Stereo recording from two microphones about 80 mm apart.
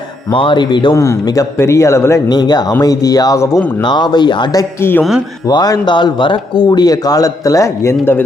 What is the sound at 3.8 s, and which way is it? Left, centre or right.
Speech, left.